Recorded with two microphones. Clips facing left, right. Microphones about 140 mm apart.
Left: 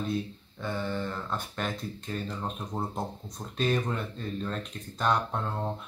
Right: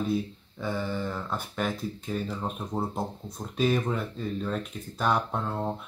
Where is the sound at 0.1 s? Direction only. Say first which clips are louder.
Right 3 dB; 5° right (ahead or behind).